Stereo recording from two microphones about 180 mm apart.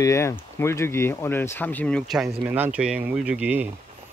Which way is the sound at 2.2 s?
10° right (ahead or behind).